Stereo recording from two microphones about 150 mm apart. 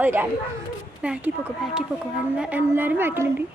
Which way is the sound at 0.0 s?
10° right (ahead or behind).